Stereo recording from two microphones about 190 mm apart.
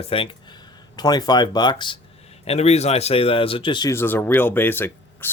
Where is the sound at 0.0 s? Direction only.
30° left (ahead or behind).